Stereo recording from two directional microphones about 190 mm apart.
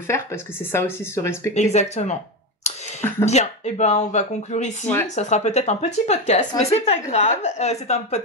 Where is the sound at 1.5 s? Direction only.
35° left (ahead or behind).